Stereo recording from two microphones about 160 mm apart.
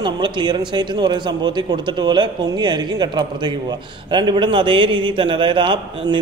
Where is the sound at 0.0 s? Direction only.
30° right (ahead or behind).